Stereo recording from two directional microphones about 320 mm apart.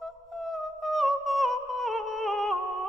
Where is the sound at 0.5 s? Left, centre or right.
Centre.